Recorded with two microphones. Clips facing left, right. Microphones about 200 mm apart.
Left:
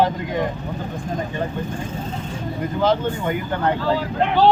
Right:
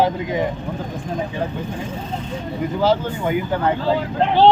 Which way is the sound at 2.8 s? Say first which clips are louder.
Right 1 dB; 5° right (ahead or behind).